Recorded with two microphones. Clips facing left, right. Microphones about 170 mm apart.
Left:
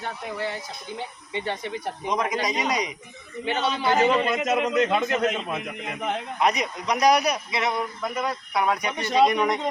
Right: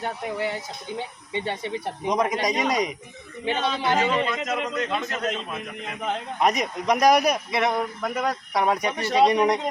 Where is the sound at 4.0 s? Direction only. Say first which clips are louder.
Left 2 dB; 10° left (ahead or behind).